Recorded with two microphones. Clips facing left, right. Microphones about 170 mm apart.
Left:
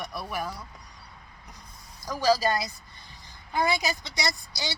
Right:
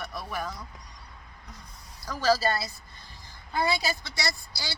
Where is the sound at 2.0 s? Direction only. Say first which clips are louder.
Left 1 dB; 15° left (ahead or behind).